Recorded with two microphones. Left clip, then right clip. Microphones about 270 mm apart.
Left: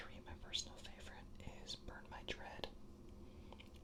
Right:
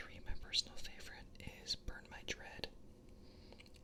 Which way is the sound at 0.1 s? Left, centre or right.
Centre.